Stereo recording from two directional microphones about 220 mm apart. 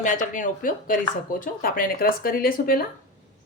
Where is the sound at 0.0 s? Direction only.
35° left (ahead or behind).